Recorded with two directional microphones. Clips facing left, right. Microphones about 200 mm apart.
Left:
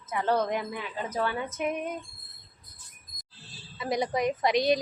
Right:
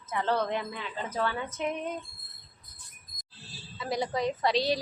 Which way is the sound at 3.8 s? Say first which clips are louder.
Left 2 dB; 15° left (ahead or behind).